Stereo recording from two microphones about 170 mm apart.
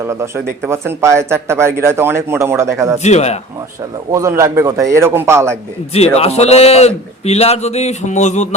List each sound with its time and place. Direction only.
0.0 s speech: 15° right (ahead or behind)
3.0 s a man's voice: 40° left (ahead or behind)
4.1 s speech: 15° right (ahead or behind)
6.1 s a man's voice: 40° left (ahead or behind)